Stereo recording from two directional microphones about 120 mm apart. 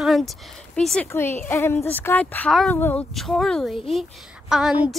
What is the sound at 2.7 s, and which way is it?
Speech, 20° left (ahead or behind).